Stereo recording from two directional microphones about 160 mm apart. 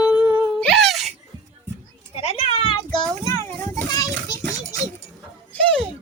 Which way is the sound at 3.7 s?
20° left (ahead or behind).